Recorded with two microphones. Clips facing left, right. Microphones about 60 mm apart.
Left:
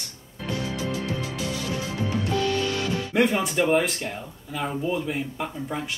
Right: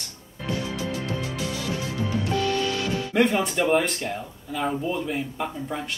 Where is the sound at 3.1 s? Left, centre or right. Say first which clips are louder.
Right 1 dB; centre.